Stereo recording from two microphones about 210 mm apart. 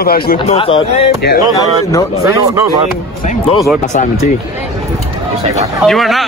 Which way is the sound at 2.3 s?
15° right (ahead or behind).